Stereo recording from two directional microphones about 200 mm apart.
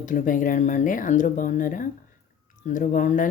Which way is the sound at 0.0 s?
40° left (ahead or behind).